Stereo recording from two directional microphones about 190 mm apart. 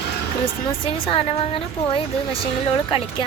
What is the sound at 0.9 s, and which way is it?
A woman's voice, 30° left (ahead or behind).